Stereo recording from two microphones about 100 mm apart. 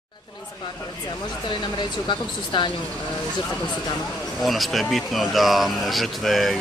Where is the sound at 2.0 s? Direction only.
55° left (ahead or behind).